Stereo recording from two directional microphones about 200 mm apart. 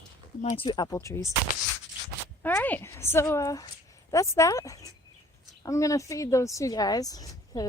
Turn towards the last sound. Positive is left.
turn(degrees=20)  # may be behind; listen again after turning